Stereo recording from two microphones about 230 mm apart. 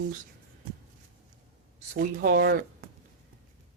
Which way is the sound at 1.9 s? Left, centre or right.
Right.